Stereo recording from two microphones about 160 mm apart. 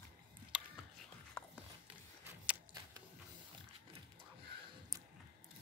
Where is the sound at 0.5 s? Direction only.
5° right (ahead or behind).